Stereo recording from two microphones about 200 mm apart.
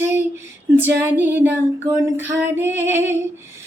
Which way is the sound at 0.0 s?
10° right (ahead or behind).